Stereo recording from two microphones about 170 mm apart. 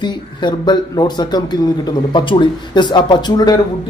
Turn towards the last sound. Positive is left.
turn(degrees=25)  # may be behind; listen again after turning